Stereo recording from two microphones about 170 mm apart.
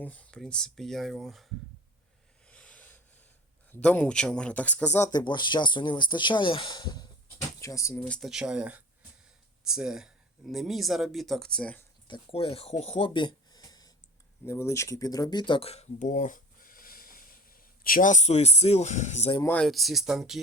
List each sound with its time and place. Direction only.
0.0 s speech: 10° left (ahead or behind)
2.5 s a sound: 10° left (ahead or behind)
3.7 s speech: 10° left (ahead or behind)
12.0 s speech: 30° left (ahead or behind)
19.4 s speech: 10° left (ahead or behind)